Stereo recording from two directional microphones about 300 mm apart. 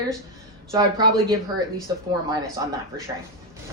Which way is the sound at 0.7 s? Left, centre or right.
Centre.